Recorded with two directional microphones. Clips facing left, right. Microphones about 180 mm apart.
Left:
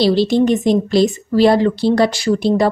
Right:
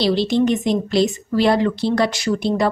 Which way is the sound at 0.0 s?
35° left (ahead or behind).